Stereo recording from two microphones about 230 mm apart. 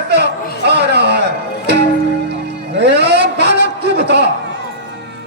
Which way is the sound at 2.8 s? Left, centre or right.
Right.